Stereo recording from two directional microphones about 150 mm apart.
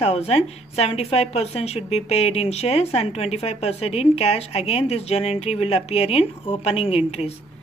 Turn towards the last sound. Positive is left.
turn(degrees=45)  # may be behind; listen again after turning